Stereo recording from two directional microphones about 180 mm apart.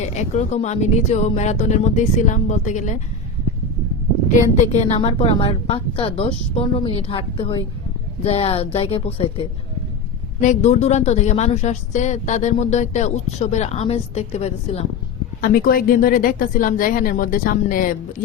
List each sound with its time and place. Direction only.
0.0 s a woman's voice: 40° left (ahead or behind)
4.3 s a woman's voice: 45° left (ahead or behind)
4.9 s a woman's voice: 30° left (ahead or behind)
15.4 s a woman's voice: 55° left (ahead or behind)